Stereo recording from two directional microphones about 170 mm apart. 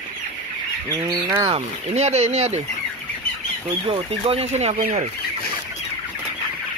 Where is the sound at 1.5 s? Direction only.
40° right (ahead or behind).